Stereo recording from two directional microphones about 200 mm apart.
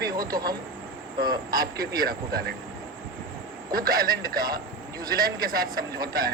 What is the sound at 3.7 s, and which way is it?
Speech, 45° right (ahead or behind).